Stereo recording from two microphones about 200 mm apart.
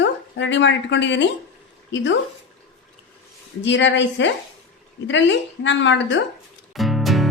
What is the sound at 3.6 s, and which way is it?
Speech, 65° left (ahead or behind).